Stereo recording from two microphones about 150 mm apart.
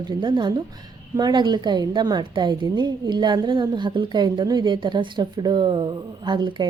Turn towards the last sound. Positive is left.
turn(degrees=-30)  # may be behind; listen again after turning